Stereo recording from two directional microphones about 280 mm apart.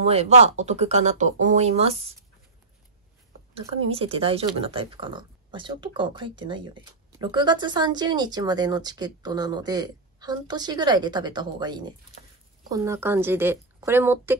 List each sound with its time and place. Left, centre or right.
0.0 s speech: right
3.5 s speech: centre